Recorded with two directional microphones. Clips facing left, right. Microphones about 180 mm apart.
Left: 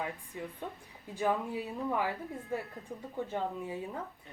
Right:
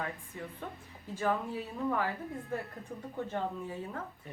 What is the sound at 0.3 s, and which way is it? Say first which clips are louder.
Speech: left 1 dB; 15° left (ahead or behind).